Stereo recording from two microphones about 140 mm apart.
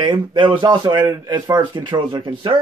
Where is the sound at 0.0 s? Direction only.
35° right (ahead or behind).